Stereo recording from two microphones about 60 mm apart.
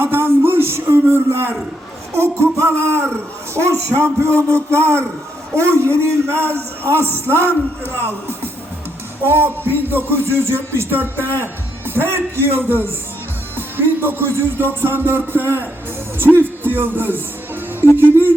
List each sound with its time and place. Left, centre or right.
0.0 s a sound: right
2.1 s a man's voice: right
9.2 s speech: right
13.6 s music: right
15.3 s speech: right